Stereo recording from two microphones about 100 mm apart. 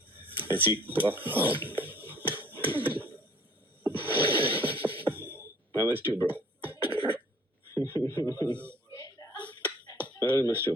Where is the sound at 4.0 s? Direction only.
20° right (ahead or behind).